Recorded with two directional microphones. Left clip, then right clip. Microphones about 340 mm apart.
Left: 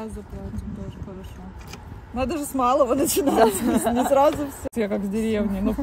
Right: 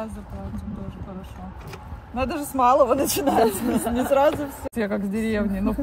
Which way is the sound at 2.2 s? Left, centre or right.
Centre.